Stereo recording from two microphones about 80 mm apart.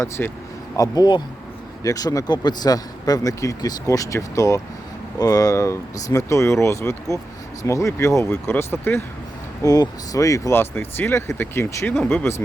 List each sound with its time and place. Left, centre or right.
0.2 s speech: left
0.8 s speech: left
5.5 s speech: left
9.6 s speech: left
10.5 s speech: left